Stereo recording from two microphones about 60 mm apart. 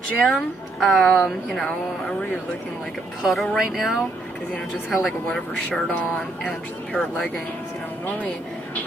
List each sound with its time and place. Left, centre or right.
0.2 s a woman's voice: centre
1.1 s speech: centre
3.2 s a woman's voice: centre
3.5 s a sound: centre
4.8 s a woman's voice: centre
5.3 s speech: left